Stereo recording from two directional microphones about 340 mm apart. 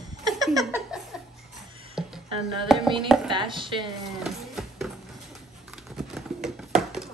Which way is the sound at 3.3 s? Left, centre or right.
Centre.